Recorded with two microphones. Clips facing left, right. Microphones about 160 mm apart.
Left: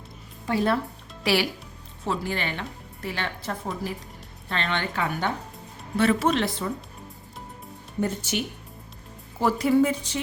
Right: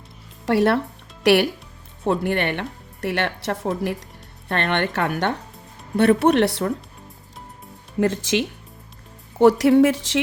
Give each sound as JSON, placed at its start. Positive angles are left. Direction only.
{"t": 0.4, "sound": "a woman's voice", "side_deg": -70}
{"t": 4.4, "sound": "a woman's voice", "side_deg": -60}
{"t": 8.0, "sound": "speech", "side_deg": -90}
{"t": 9.4, "sound": "a woman's voice", "side_deg": -75}